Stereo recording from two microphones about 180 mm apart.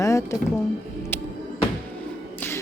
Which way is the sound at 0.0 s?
15° left (ahead or behind).